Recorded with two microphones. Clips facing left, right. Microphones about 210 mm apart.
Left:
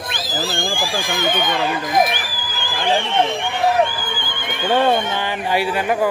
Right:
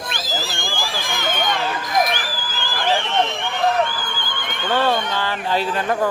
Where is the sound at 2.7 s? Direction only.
15° left (ahead or behind).